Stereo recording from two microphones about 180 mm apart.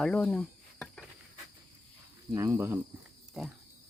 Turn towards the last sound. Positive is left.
turn(degrees=-5)  # may be behind; listen again after turning